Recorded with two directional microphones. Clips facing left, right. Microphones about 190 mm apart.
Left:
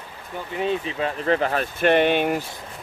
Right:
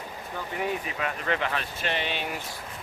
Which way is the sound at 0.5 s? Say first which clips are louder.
Left 6 dB; 25° left (ahead or behind).